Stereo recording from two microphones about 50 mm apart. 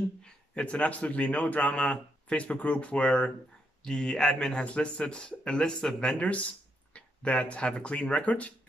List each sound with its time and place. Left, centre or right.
0.2 s a man's voice: left
6.1 s a man's voice: left